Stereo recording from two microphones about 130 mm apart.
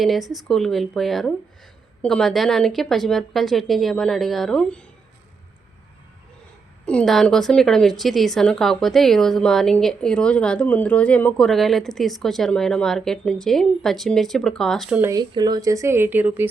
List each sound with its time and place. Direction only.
0.0 s speech: centre (ahead or behind)
6.8 s speech: 5° left (ahead or behind)
15.0 s a woman's voice: 30° right (ahead or behind); by 16.5 s 15° right (ahead or behind)